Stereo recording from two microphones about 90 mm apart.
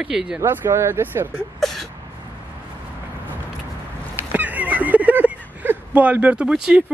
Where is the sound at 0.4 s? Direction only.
30° right (ahead or behind).